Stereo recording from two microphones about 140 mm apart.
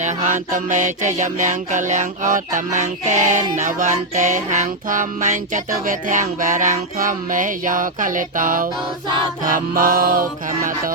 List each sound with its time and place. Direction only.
0.0 s music: 60° right (ahead or behind); by 10.9 s 90° right